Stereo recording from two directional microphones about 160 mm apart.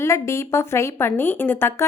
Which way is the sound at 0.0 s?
15° left (ahead or behind).